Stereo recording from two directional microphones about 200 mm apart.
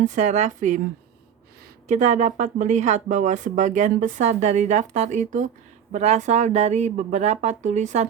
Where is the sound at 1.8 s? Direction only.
35° right (ahead or behind).